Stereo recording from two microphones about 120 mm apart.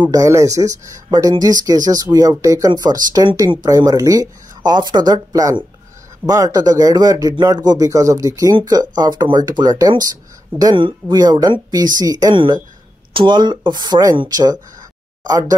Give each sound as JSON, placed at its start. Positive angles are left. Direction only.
{"t": 0.0, "sound": "speech", "side_deg": -30}